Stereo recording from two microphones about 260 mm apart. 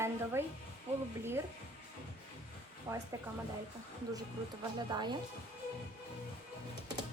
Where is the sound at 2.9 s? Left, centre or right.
Centre.